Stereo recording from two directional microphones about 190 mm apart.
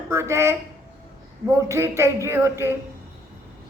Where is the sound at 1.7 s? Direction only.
15° right (ahead or behind).